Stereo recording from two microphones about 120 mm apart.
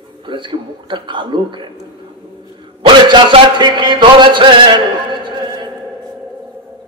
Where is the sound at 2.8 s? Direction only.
40° right (ahead or behind).